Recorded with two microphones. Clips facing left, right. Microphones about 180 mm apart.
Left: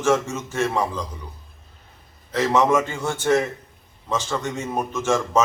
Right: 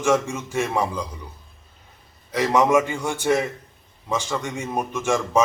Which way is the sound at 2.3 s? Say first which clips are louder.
Right 1 dB; 10° right (ahead or behind).